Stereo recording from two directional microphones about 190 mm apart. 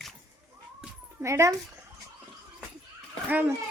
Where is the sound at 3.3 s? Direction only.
10° right (ahead or behind).